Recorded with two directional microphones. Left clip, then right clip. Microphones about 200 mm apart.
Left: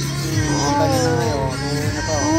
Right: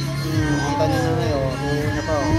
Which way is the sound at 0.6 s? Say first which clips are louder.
Left 5 dB; 25° left (ahead or behind).